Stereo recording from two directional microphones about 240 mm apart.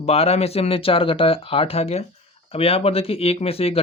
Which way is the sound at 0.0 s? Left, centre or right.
Left.